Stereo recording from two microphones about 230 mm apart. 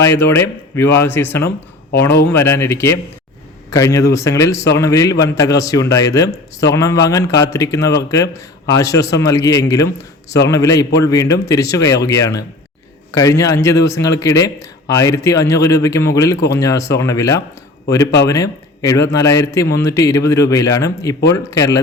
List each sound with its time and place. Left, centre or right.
0.0 s a man's voice: centre